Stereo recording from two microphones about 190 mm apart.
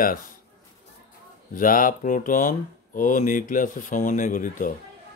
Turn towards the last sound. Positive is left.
turn(degrees=45)  # may be behind; listen again after turning